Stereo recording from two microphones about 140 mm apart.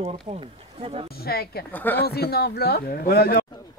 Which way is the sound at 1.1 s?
90° left.